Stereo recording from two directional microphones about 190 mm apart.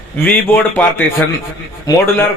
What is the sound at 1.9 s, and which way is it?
Speech, 20° left (ahead or behind).